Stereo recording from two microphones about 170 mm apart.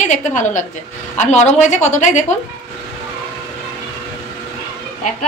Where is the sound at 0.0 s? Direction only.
45° left (ahead or behind).